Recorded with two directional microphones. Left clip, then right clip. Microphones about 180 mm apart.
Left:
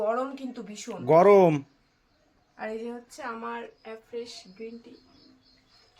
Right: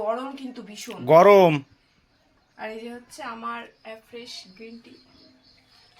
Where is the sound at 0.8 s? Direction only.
Centre (ahead or behind).